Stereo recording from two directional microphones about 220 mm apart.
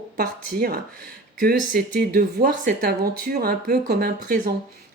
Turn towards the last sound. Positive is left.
turn(degrees=-45)  # may be behind; listen again after turning